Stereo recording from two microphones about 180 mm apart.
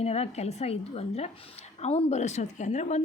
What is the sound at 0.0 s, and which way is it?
A woman's voice, 35° left (ahead or behind).